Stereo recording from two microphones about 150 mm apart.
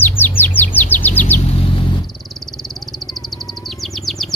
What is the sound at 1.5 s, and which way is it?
Vehicle, 40° left (ahead or behind).